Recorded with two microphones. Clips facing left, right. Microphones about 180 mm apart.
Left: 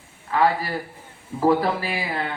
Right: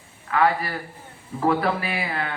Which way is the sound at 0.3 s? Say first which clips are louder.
Left 1 dB; 30° left (ahead or behind).